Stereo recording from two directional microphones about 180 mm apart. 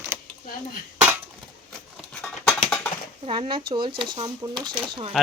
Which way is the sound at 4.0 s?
25° right (ahead or behind).